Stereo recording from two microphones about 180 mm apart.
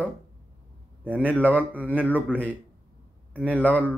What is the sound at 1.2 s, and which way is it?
A man's voice, 10° left (ahead or behind).